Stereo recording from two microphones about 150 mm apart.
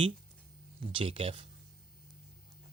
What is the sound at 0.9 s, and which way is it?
Speech, 35° right (ahead or behind).